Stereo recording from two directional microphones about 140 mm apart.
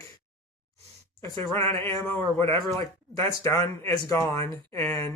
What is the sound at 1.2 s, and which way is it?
Speech, 20° left (ahead or behind).